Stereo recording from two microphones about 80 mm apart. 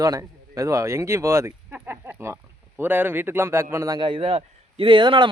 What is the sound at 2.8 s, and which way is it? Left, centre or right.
A man's voice, right.